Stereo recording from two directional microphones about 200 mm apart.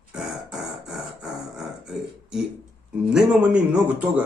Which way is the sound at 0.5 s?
Centre (ahead or behind).